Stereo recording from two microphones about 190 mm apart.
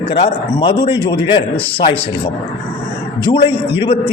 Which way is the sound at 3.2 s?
25° left (ahead or behind).